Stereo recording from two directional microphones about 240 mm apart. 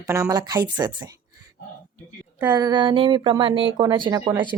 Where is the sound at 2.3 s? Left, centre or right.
Centre.